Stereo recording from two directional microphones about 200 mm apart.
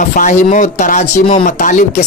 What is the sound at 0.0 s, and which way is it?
Speech, 40° left (ahead or behind).